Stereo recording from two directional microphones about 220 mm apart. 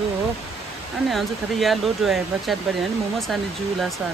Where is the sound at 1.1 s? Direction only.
Centre (ahead or behind).